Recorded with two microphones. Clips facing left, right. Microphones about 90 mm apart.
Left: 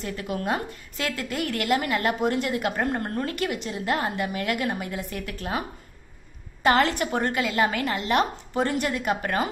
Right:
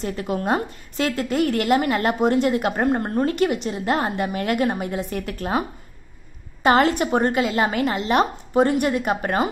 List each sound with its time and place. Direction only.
0.0 s a woman's voice: 25° right (ahead or behind)
6.6 s a woman's voice: 20° right (ahead or behind)